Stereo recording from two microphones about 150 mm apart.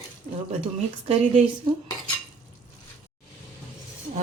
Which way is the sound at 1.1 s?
45° right (ahead or behind).